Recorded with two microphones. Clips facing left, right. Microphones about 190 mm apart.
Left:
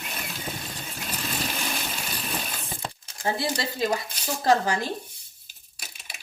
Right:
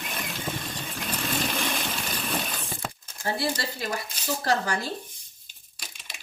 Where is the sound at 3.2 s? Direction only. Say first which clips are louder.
Left 1 dB; 15° left (ahead or behind).